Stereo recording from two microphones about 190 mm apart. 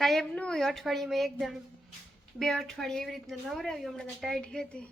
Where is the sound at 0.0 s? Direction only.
Centre (ahead or behind).